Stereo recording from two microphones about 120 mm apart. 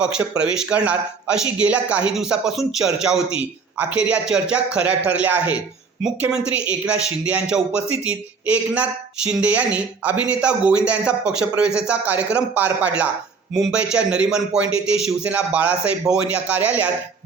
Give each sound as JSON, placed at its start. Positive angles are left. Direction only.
{"t": 0.0, "sound": "speech", "side_deg": -10}